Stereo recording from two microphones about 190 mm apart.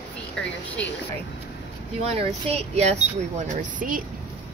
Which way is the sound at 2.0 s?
30° right (ahead or behind).